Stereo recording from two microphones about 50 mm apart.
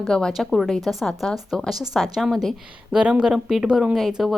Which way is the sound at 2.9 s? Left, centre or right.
Centre.